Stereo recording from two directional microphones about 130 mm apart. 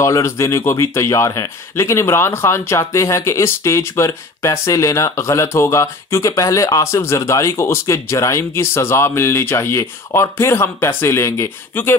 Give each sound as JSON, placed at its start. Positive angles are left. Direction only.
{"t": 0.0, "sound": "speech", "side_deg": 25}